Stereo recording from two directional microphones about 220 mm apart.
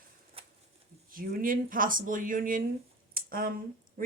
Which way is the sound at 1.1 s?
40° right (ahead or behind).